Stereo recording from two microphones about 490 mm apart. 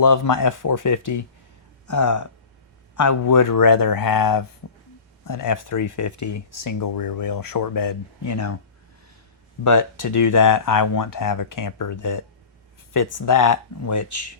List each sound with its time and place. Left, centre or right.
0.0 s speech: left
9.6 s speech: left